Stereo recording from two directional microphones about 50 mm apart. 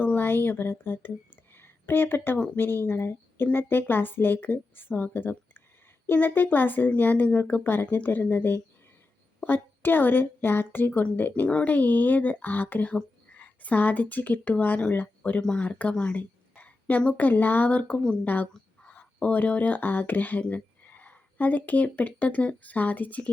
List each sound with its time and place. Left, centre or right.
0.0 s speech: left
1.5 s a sound: left
2.6 s speech: left
7.6 s speech: left
11.4 s speech: left
11.7 s speech: left
15.4 s a woman's voice: left
18.9 s a sound: left
19.4 s speech: left